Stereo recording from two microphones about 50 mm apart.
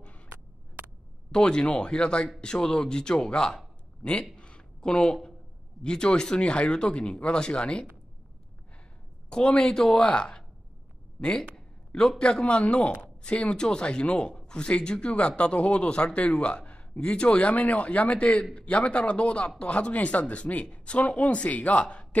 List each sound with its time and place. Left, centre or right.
1.3 s speech: centre
4.4 s a sound: centre
5.8 s speech: centre
9.3 s a man's voice: left